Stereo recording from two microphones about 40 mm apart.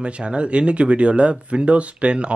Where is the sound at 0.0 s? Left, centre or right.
Right.